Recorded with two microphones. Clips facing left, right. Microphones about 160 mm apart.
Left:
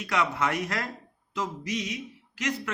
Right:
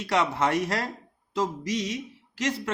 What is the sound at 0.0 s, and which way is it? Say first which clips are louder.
Speech: right 3 dB; 30° right (ahead or behind).